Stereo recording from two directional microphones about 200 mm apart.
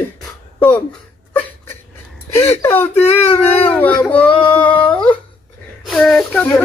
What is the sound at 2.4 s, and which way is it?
A man's voice, 15° left (ahead or behind).